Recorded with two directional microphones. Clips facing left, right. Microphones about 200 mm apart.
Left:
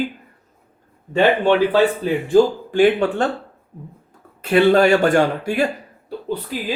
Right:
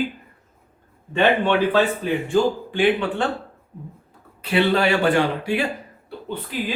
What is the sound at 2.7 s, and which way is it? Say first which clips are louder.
Speech: left 5 dB; 45° left (ahead or behind).